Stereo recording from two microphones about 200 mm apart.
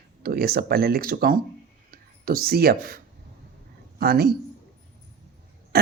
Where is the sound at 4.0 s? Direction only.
50° right (ahead or behind).